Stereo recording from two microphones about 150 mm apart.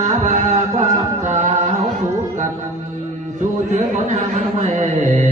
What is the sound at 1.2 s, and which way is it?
Music, 55° right (ahead or behind).